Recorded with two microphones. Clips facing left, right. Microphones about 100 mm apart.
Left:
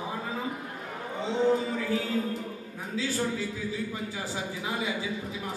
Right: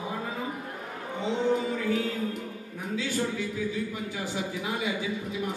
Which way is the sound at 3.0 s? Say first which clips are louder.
Left 1 dB; 35° left (ahead or behind).